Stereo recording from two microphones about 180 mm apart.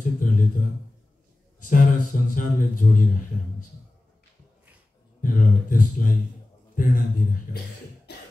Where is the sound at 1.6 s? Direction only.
45° left (ahead or behind).